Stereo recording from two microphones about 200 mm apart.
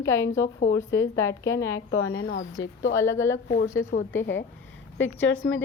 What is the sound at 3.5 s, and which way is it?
Speech, 40° left (ahead or behind).